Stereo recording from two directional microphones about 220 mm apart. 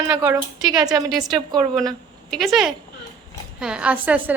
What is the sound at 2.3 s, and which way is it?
A woman's voice, centre (ahead or behind).